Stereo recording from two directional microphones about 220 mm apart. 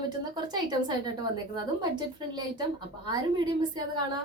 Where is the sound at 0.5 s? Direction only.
20° right (ahead or behind).